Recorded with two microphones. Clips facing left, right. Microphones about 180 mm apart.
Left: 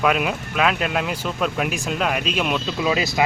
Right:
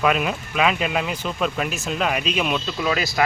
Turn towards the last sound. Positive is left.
turn(degrees=20)  # may be behind; listen again after turning